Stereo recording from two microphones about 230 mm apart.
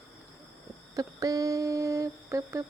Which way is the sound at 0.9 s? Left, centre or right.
Centre.